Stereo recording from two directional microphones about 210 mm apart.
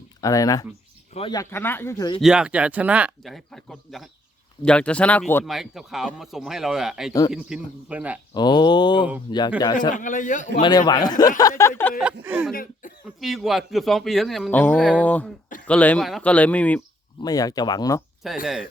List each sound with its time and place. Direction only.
0.2 s speech: 15° left (ahead or behind)
2.2 s speech: 5° right (ahead or behind)
8.3 s speech: 20° left (ahead or behind)
9.9 s a man's voice: 40° left (ahead or behind)
10.6 s speech: 20° left (ahead or behind)
12.2 s speech: 5° right (ahead or behind)
17.2 s speech: 15° left (ahead or behind)
18.2 s speech: centre (ahead or behind)